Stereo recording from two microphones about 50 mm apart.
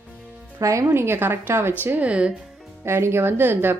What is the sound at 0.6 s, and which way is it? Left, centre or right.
Speech, right.